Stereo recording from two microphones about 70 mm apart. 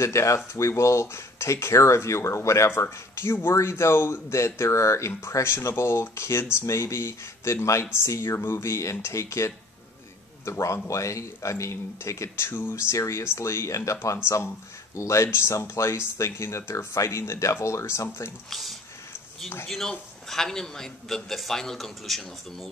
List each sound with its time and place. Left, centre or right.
0.0 s speech: left
18.5 s a man's voice: centre
20.2 s a man's voice: centre